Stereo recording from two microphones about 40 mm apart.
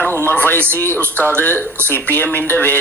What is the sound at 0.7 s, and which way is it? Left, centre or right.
Speech, left.